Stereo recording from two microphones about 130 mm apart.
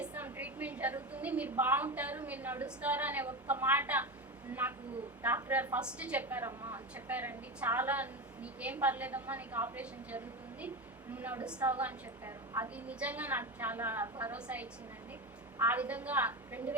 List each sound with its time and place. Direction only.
0.0 s a woman's voice: 15° right (ahead or behind)
5.2 s a woman's voice: 15° right (ahead or behind)